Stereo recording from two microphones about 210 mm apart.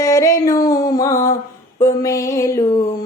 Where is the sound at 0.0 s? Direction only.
15° left (ahead or behind).